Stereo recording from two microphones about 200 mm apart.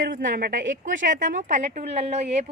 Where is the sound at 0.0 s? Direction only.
45° right (ahead or behind).